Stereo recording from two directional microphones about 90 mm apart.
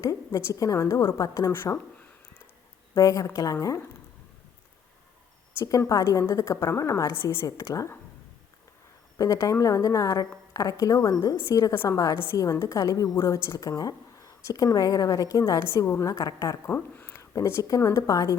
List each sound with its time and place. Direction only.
0.0 s a woman's voice: 40° left (ahead or behind)
2.9 s a woman's voice: 40° left (ahead or behind)
5.9 s a woman's voice: 40° left (ahead or behind)
7.4 s a woman's voice: 40° left (ahead or behind)
9.1 s a woman's voice: 40° left (ahead or behind)
11.7 s a woman's voice: 25° left (ahead or behind)
12.4 s a woman's voice: 40° left (ahead or behind)
15.6 s a woman's voice: 30° left (ahead or behind)
16.0 s a woman's voice: 45° left (ahead or behind)
16.6 s speech: 20° left (ahead or behind)
17.2 s a woman's voice: 35° left (ahead or behind)